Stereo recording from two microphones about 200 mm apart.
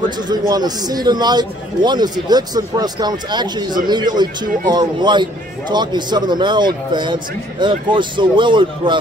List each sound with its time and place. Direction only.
0.3 s a man's voice: 20° right (ahead or behind)